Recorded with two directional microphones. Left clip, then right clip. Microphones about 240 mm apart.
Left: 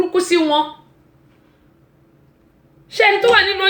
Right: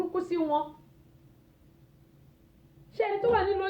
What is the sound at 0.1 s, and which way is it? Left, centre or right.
Speech, left.